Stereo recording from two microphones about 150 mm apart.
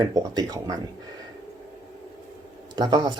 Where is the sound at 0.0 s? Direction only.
25° right (ahead or behind).